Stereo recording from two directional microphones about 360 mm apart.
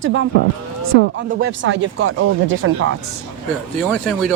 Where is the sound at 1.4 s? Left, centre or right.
Right.